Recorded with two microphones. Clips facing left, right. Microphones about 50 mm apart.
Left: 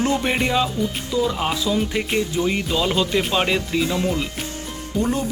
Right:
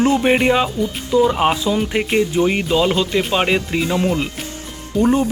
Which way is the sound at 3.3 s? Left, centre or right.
Centre.